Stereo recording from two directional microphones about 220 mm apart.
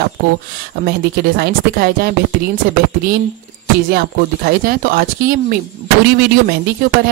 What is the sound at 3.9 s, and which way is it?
Speech, 45° right (ahead or behind).